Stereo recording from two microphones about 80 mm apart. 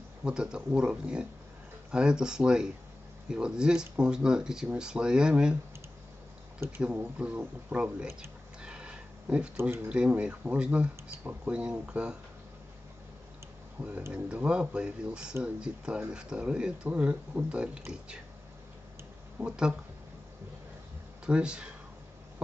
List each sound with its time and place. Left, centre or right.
0.2 s speech: centre
6.8 s speech: centre
8.6 s a sound: centre
9.8 s speech: centre
14.1 s speech: centre
19.4 s speech: centre
21.3 s speech: centre